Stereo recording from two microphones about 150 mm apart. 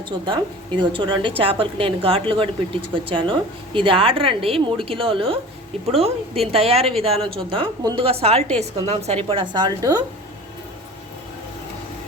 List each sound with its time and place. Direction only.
0.1 s a woman's voice: 35° right (ahead or behind)
7.8 s a woman's voice: 25° right (ahead or behind)
8.0 s a woman's voice: 40° right (ahead or behind)
9.3 s a woman's voice: 30° right (ahead or behind)